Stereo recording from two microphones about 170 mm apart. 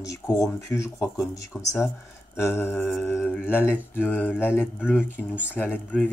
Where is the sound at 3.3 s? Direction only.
5° right (ahead or behind).